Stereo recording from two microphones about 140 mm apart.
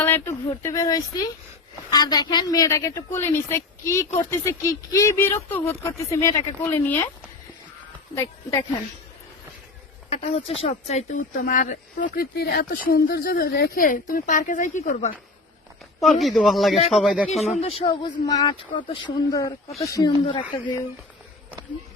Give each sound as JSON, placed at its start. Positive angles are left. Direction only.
{"t": 0.0, "sound": "a woman's voice", "side_deg": 15}
{"t": 8.1, "sound": "a woman's voice", "side_deg": 20}
{"t": 10.1, "sound": "speech", "side_deg": 45}
{"t": 11.4, "sound": "speech", "side_deg": 70}
{"t": 16.0, "sound": "a man's voice", "side_deg": 0}
{"t": 17.4, "sound": "a woman's voice", "side_deg": 50}
{"t": 20.2, "sound": "speech", "side_deg": 40}